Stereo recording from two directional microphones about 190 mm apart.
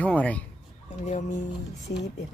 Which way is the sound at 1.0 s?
40° left (ahead or behind).